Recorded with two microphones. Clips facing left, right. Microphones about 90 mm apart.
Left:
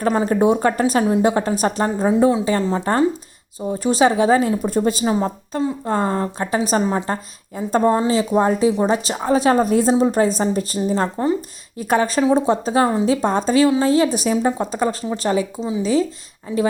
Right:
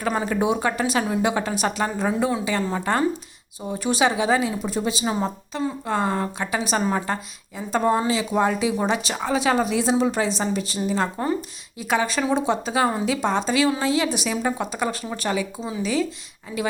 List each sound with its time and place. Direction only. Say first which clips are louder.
0.0 s a woman's voice: left 6 dB; 35° left (ahead or behind)